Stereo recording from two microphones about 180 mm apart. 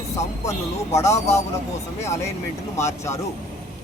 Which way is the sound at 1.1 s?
40° left (ahead or behind).